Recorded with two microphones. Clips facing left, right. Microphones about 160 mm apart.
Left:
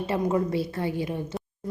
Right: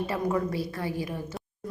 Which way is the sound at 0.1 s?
25° left (ahead or behind).